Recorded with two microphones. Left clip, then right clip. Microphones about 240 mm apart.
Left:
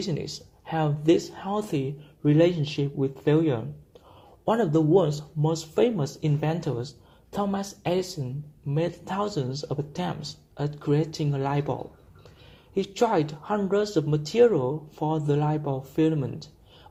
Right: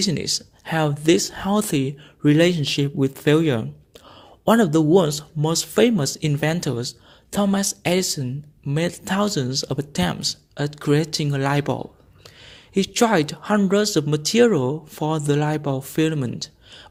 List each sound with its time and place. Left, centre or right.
0.0 s speech: right